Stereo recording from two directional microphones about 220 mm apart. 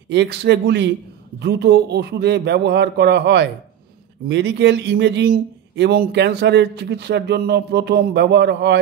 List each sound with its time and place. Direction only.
0.1 s a man's voice: 50° right (ahead or behind)